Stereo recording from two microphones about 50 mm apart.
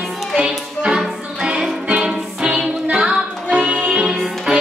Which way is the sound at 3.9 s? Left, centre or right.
Centre.